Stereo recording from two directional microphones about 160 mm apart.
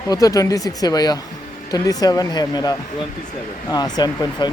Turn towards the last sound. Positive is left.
turn(degrees=25)  # may be behind; listen again after turning